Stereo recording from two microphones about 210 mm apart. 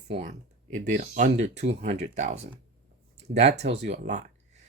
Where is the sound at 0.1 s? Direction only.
35° right (ahead or behind).